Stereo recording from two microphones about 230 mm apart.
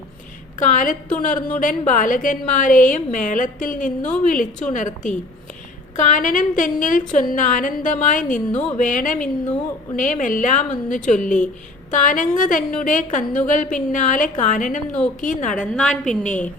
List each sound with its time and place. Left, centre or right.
0.6 s a woman's voice: left
15.6 s a woman's voice: centre